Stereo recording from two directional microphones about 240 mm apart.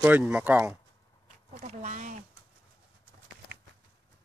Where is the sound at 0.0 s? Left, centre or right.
Centre.